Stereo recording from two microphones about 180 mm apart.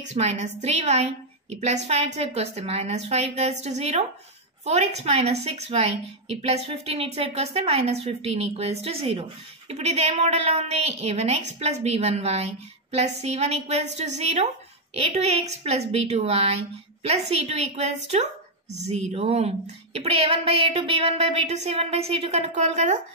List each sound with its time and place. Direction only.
0.1 s a woman's voice: 40° right (ahead or behind)